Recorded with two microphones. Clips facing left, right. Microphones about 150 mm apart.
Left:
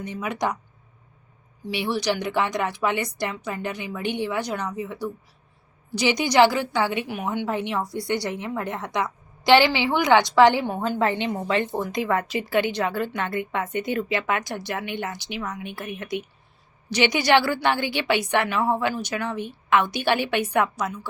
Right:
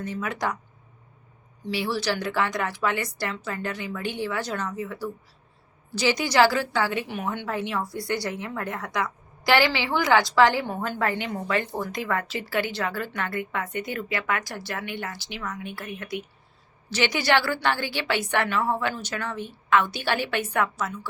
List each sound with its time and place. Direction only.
0.0 s speech: 20° left (ahead or behind)
1.6 s a woman's voice: 20° left (ahead or behind)